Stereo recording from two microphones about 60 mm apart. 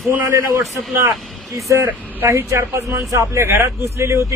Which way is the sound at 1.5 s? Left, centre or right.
Right.